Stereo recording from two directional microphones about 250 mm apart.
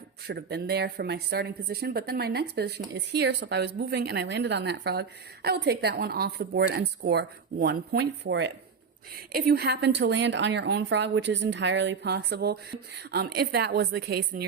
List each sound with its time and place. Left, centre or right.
0.3 s speech: right